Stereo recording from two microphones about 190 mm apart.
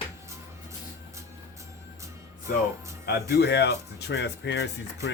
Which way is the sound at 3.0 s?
55° left (ahead or behind).